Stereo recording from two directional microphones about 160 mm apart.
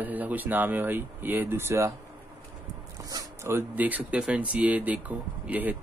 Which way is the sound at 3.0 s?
20° right (ahead or behind).